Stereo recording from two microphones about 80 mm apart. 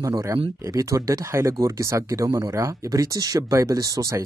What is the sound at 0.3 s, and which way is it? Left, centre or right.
Speech, right.